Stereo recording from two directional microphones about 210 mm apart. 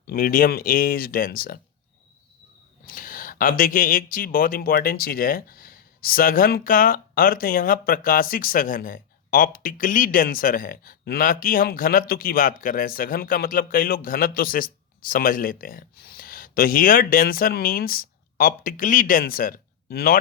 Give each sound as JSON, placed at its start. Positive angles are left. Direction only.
{"t": 0.1, "sound": "speech", "side_deg": 45}
{"t": 2.8, "sound": "speech", "side_deg": 40}